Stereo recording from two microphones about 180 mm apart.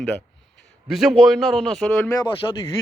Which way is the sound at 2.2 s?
25° left (ahead or behind).